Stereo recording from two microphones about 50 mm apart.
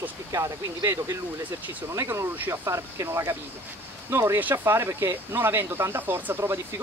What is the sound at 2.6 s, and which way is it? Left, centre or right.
Speech, right.